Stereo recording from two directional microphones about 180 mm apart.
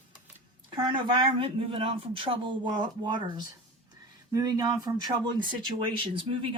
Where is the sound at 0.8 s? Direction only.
25° right (ahead or behind).